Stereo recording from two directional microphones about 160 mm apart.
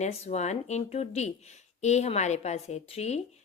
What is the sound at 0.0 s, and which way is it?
A woman's voice, 45° left (ahead or behind).